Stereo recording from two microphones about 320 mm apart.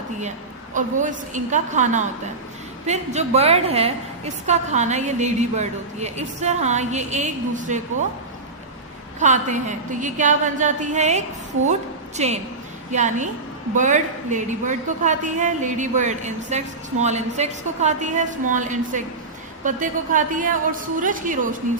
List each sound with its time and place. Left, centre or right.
0.7 s a woman's voice: right
9.2 s a woman's voice: right